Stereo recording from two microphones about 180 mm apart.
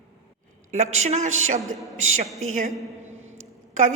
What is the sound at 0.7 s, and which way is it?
Speech, 40° right (ahead or behind).